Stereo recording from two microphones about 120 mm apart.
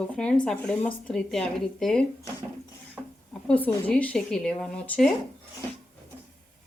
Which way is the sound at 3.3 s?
10° left (ahead or behind).